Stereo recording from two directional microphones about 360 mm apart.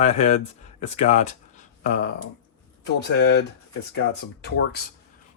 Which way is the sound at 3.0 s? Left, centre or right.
Left.